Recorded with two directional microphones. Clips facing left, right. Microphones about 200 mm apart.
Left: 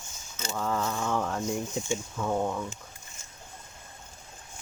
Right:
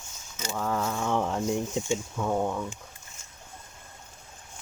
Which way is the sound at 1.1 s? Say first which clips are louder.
Right 3 dB; 15° right (ahead or behind).